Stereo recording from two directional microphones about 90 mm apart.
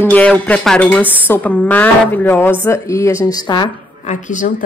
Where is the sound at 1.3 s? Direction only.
20° left (ahead or behind).